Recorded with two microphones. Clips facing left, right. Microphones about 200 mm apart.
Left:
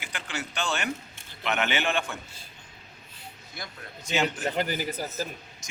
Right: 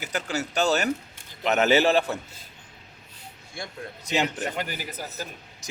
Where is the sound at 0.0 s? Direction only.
40° right (ahead or behind).